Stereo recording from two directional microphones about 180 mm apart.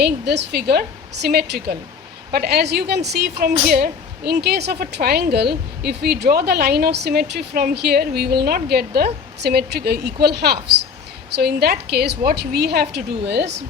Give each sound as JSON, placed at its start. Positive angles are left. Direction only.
{"t": 0.0, "sound": "a woman's voice", "side_deg": -65}